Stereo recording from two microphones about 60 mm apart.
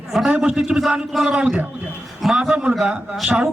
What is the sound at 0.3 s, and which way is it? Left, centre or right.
Speech, centre.